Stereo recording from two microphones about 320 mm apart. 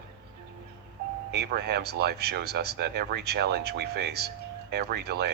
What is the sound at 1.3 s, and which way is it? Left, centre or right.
Speech, right.